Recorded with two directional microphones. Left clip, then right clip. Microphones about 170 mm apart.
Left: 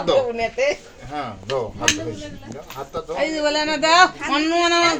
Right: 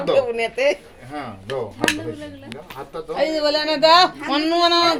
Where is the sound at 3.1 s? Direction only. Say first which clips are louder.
Right 1 dB; 90° right.